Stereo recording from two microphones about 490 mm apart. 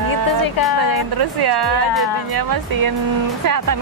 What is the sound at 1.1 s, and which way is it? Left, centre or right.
Speech, right.